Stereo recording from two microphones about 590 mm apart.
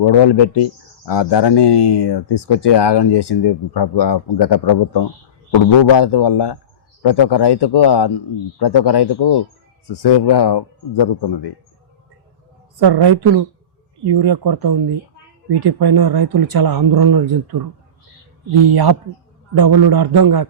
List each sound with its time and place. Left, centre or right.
0.0 s a man's voice: left
12.7 s speech: right
18.7 s speech: right